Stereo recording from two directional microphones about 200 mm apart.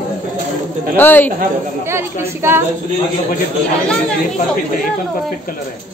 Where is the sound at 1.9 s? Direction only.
10° right (ahead or behind).